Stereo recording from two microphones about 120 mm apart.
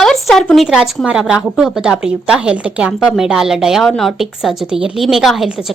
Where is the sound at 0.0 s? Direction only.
Centre (ahead or behind).